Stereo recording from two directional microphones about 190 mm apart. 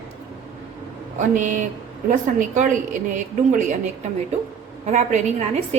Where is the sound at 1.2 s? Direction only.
40° right (ahead or behind).